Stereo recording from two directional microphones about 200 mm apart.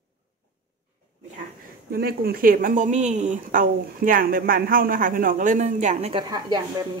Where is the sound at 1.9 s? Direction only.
50° right (ahead or behind); by 6.2 s 30° right (ahead or behind).